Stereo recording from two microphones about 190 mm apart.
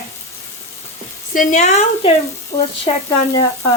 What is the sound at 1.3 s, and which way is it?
A woman's voice, 45° left (ahead or behind).